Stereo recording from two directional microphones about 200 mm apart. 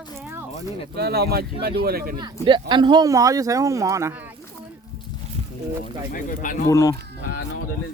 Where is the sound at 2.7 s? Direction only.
20° right (ahead or behind).